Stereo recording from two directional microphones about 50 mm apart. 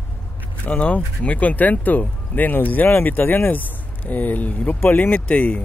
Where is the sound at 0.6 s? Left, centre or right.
Left.